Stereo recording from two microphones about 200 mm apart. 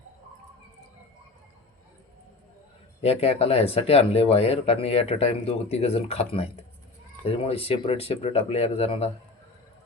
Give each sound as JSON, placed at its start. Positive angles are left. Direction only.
{"t": 3.0, "sound": "speech", "side_deg": 30}